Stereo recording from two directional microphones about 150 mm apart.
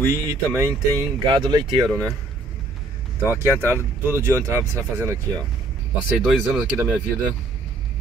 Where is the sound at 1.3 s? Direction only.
30° right (ahead or behind).